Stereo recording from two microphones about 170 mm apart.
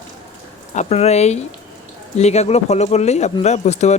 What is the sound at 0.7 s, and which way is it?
Speech, 40° left (ahead or behind).